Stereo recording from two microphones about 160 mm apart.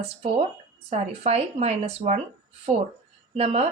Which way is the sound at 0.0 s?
40° right (ahead or behind).